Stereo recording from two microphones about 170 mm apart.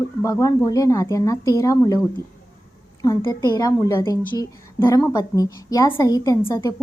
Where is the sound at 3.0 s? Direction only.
20° left (ahead or behind).